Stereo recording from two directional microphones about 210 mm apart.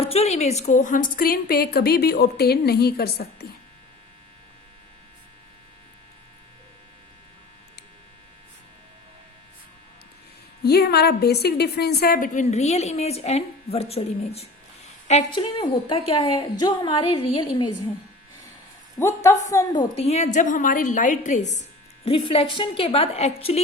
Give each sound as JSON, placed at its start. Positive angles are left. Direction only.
{"t": 0.0, "sound": "a woman's voice", "side_deg": 30}
{"t": 10.6, "sound": "a woman's voice", "side_deg": 50}
{"t": 18.9, "sound": "a woman's voice", "side_deg": 10}